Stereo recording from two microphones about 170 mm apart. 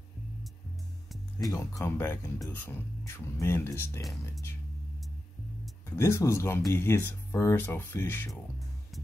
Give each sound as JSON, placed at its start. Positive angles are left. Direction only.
{"t": 1.5, "sound": "speech", "side_deg": 20}
{"t": 5.9, "sound": "speech", "side_deg": 15}
{"t": 8.3, "sound": "music", "side_deg": 0}